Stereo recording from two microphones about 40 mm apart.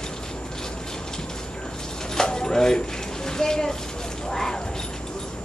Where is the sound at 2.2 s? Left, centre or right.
Centre.